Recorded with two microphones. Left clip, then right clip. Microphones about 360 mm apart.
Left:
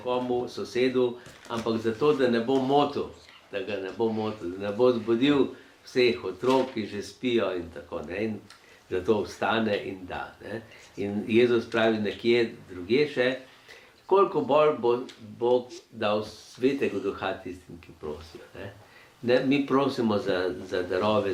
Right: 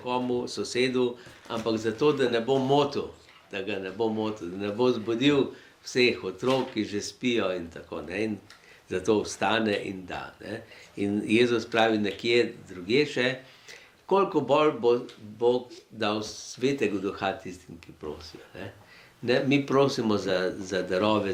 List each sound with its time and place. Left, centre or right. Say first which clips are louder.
0.0 s a man's voice: left 1 dB; right
8.9 s a man's voice: even; right
16.6 s a man's voice: left 1 dB; right
18.6 s a man's voice: even; right